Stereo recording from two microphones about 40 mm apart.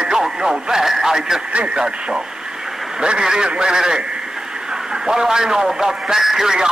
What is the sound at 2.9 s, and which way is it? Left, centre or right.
A man's voice, right.